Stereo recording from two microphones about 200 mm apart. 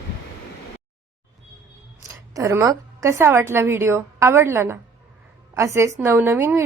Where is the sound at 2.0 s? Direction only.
15° right (ahead or behind).